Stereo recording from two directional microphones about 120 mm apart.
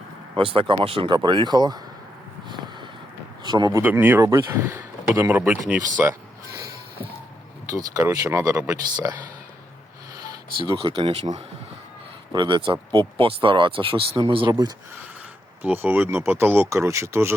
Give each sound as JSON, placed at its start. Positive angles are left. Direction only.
{"t": 0.3, "sound": "speech", "side_deg": -50}
{"t": 3.4, "sound": "speech", "side_deg": -35}
{"t": 3.8, "sound": "speech", "side_deg": -15}
{"t": 5.4, "sound": "speech", "side_deg": -10}
{"t": 6.0, "sound": "a sound", "side_deg": -20}
{"t": 7.7, "sound": "speech", "side_deg": -25}
{"t": 10.8, "sound": "speech", "side_deg": -45}
{"t": 12.3, "sound": "speech", "side_deg": -40}
{"t": 15.6, "sound": "speech", "side_deg": -15}